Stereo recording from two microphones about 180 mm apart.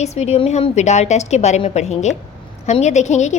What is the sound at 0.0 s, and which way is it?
A woman's voice, 35° left (ahead or behind).